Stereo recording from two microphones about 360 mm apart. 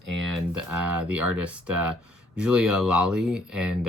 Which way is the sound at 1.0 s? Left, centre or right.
Centre.